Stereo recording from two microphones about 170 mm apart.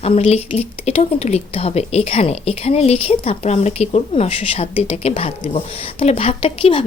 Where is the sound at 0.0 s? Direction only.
40° left (ahead or behind).